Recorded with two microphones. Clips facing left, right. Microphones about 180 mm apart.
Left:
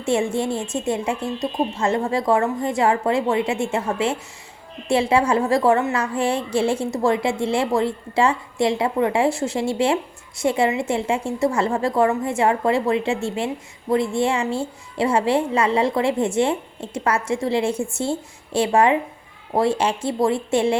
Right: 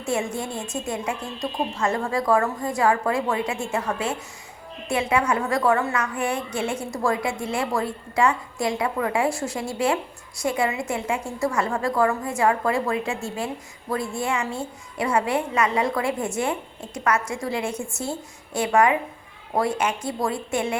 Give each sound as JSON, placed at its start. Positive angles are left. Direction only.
{"t": 0.0, "sound": "a woman's voice", "side_deg": 30}